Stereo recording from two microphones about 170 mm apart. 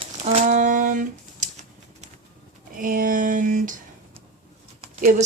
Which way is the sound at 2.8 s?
55° right (ahead or behind).